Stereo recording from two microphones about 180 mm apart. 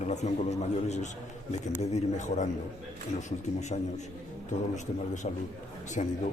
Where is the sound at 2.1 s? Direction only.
40° left (ahead or behind).